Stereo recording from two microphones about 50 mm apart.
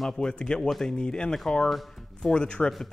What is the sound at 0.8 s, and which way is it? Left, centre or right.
A man's voice, centre.